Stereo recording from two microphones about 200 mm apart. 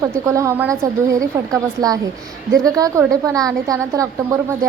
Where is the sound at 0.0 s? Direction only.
15° right (ahead or behind).